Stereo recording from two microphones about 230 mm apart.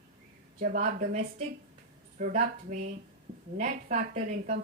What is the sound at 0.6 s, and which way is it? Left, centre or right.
A woman's voice, right.